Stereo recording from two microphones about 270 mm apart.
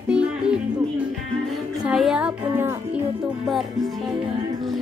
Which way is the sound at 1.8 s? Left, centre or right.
Centre.